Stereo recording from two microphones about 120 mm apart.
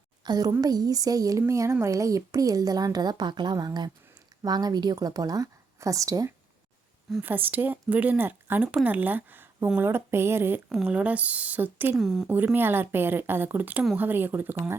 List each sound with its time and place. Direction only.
0.3 s speech: 35° right (ahead or behind)
7.2 s speech: 15° right (ahead or behind)
11.9 s speech: 5° right (ahead or behind)
12.5 s speech: 15° right (ahead or behind)